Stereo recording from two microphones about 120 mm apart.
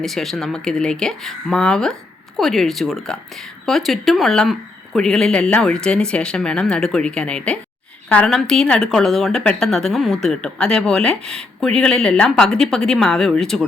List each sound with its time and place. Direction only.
0.0 s speech: centre (ahead or behind)